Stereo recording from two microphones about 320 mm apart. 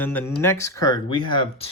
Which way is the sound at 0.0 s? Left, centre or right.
Centre.